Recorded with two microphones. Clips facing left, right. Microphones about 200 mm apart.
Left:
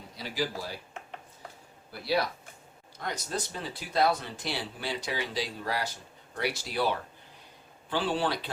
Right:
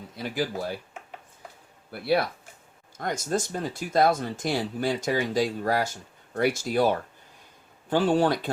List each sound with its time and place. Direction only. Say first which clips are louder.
0.2 s speech: right 4 dB; 50° right (ahead or behind)
1.9 s speech: right 5 dB; 55° right (ahead or behind)